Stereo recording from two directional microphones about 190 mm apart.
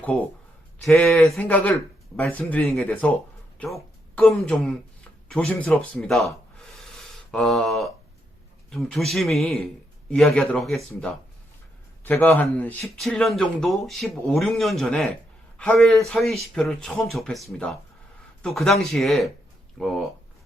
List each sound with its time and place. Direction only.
0.8 s a man's voice: centre (ahead or behind)
12.0 s a man's voice: 10° left (ahead or behind)